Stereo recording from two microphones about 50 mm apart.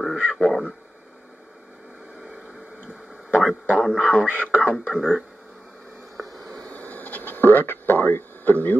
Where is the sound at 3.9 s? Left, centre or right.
Centre.